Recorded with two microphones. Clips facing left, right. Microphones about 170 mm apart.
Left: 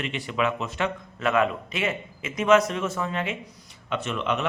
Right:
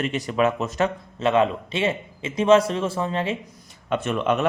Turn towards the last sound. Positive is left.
turn(degrees=-50)  # may be behind; listen again after turning